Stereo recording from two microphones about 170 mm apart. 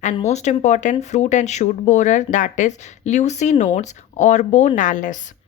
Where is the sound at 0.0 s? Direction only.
40° left (ahead or behind).